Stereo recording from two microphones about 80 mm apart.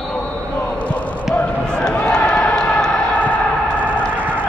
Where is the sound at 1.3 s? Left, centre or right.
Centre.